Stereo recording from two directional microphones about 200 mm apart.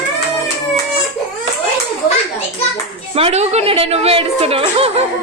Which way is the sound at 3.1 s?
30° right (ahead or behind).